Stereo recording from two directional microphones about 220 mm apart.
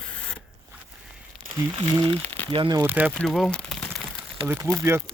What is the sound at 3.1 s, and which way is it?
Speech, centre (ahead or behind).